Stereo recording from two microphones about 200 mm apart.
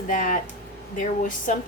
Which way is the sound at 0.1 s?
45° left (ahead or behind).